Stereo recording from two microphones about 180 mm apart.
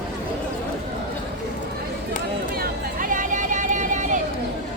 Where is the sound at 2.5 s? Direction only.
55° right (ahead or behind).